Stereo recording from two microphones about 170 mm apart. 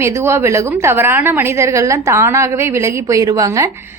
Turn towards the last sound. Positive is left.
turn(degrees=-20)  # may be behind; listen again after turning